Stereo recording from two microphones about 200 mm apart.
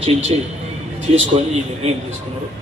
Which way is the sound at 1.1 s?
30° right (ahead or behind).